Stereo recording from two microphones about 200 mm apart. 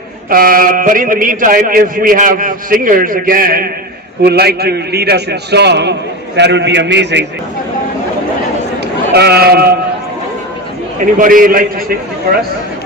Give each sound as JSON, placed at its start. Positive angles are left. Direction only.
{"t": 0.3, "sound": "a man's voice", "side_deg": -45}
{"t": 9.1, "sound": "a man's voice", "side_deg": -55}
{"t": 11.2, "sound": "a man's voice", "side_deg": -45}